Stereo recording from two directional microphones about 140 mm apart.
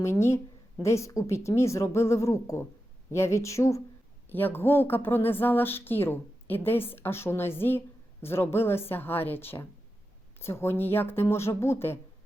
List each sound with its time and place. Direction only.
0.0 s a woman's voice: 20° left (ahead or behind)